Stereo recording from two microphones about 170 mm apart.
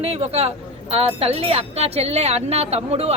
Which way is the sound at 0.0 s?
35° right (ahead or behind).